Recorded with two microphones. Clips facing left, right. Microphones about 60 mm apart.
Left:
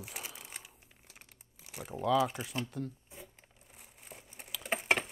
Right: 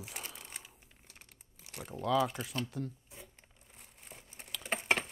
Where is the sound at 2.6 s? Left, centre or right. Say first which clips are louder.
Even; centre.